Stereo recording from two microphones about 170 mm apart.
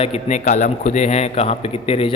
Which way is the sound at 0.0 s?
40° left (ahead or behind).